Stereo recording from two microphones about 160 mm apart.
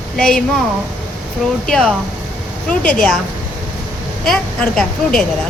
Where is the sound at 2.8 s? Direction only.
60° left (ahead or behind).